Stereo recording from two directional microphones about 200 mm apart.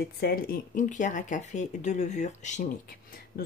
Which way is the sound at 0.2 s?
50° left (ahead or behind).